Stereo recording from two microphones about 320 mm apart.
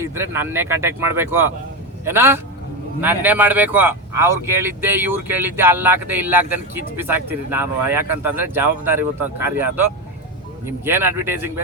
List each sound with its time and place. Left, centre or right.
0.0 s speech: centre